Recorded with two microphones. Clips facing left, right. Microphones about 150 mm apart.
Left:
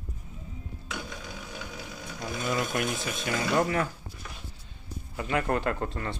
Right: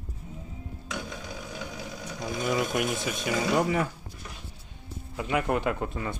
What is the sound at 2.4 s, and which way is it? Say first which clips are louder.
Speech: right 2 dB; 5° right (ahead or behind).